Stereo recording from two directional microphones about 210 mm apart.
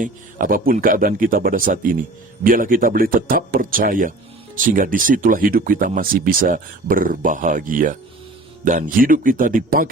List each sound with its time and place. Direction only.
0.0 s speech: 40° right (ahead or behind)